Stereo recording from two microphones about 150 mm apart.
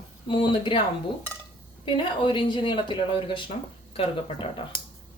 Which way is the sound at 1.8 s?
35° left (ahead or behind).